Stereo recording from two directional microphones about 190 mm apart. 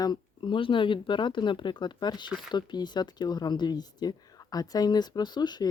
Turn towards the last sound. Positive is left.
turn(degrees=20)  # may be behind; listen again after turning